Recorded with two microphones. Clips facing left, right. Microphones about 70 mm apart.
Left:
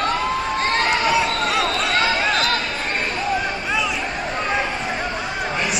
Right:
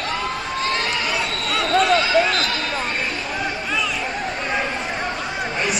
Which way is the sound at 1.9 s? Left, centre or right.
Left.